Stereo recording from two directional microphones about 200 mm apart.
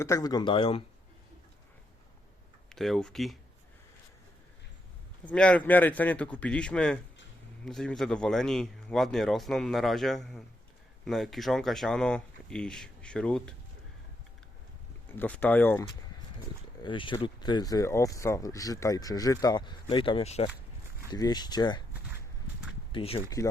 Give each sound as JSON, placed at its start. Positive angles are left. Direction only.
{"t": 0.0, "sound": "speech", "side_deg": 15}
{"t": 2.6, "sound": "speech", "side_deg": 0}
{"t": 5.2, "sound": "speech", "side_deg": 5}
{"t": 15.1, "sound": "speech", "side_deg": 10}
{"t": 16.8, "sound": "speech", "side_deg": 25}
{"t": 22.9, "sound": "speech", "side_deg": 25}